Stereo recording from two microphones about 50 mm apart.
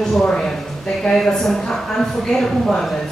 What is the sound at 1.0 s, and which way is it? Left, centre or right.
A woman's voice, centre.